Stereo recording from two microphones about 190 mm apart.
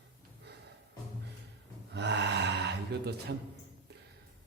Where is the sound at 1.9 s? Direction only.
65° right (ahead or behind).